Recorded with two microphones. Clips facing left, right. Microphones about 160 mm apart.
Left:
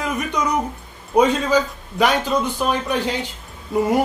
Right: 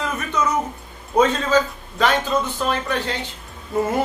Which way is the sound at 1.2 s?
15° left (ahead or behind).